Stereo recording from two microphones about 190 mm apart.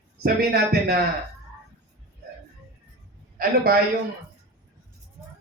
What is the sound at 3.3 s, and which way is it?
Speech, 55° right (ahead or behind).